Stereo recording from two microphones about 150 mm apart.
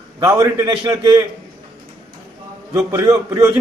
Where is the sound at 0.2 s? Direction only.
20° right (ahead or behind).